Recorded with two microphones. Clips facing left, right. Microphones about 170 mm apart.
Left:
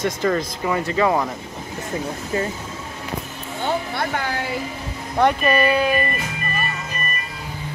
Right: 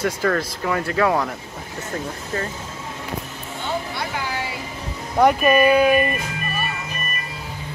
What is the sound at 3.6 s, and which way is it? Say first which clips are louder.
Vehicle: left 4 dB; 55° left (ahead or behind).